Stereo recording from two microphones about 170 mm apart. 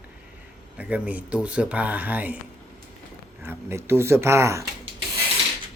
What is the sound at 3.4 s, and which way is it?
A man's voice, 15° right (ahead or behind).